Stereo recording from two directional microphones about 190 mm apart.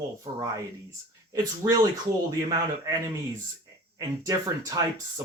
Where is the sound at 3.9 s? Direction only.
20° right (ahead or behind).